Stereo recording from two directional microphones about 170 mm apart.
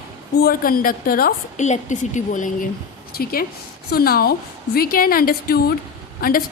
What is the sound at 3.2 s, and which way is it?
A woman's voice, 60° left (ahead or behind).